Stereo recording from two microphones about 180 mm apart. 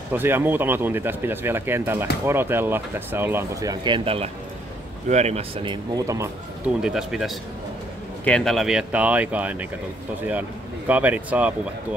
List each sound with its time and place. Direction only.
0.1 s speech: 10° right (ahead or behind)
6.8 s speech: 5° right (ahead or behind)
10.9 s speech: 10° right (ahead or behind)